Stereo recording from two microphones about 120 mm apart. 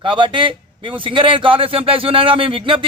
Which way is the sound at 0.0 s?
45° right (ahead or behind).